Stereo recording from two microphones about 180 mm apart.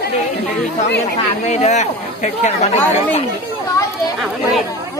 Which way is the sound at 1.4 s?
40° left (ahead or behind).